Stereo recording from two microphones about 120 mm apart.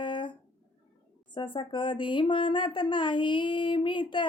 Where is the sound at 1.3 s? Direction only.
40° left (ahead or behind).